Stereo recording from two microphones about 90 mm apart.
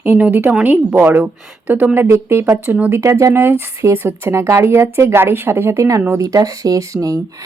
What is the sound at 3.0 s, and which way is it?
A woman's voice, 35° right (ahead or behind).